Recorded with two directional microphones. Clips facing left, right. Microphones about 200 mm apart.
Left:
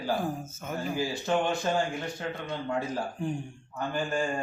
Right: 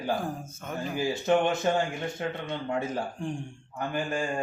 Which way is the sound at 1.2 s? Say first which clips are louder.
Right 4 dB; 20° right (ahead or behind).